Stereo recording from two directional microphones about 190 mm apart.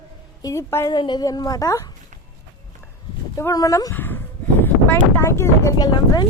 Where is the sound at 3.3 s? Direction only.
15° left (ahead or behind).